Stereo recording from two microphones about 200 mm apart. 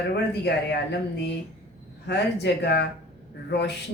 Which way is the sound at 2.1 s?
55° left (ahead or behind).